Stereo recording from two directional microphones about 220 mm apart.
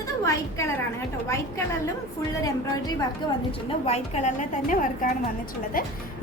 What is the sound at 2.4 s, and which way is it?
A woman's voice, 15° left (ahead or behind).